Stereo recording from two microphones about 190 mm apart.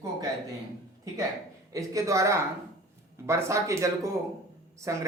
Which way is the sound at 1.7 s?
15° right (ahead or behind).